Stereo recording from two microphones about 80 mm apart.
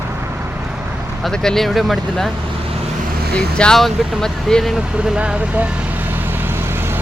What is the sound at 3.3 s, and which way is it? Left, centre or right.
Speech, centre.